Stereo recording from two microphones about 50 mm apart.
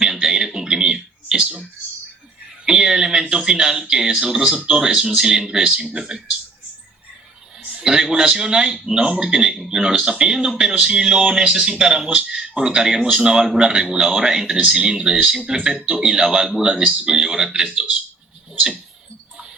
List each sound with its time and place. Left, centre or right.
0.0 s a sound: centre
2.6 s speech: centre
7.7 s speech: centre